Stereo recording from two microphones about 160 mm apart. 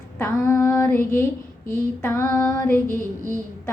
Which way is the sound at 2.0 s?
15° left (ahead or behind).